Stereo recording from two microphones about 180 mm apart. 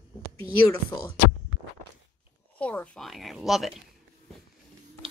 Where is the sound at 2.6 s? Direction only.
5° left (ahead or behind).